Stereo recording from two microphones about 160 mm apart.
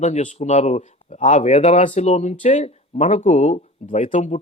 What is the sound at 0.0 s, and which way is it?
Speech, 45° left (ahead or behind).